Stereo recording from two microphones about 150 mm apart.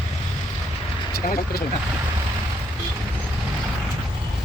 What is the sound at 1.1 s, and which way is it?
Speech, 90° left.